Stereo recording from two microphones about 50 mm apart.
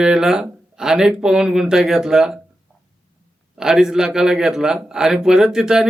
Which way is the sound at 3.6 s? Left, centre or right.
Centre.